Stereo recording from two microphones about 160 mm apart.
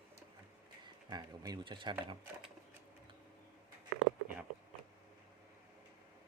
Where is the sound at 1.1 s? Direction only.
25° right (ahead or behind).